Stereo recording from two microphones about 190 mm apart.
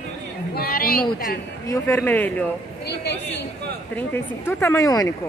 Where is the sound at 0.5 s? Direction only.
55° left (ahead or behind).